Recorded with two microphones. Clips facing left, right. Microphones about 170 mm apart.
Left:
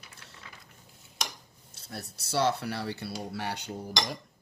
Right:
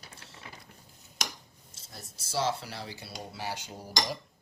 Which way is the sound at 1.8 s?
65° left (ahead or behind).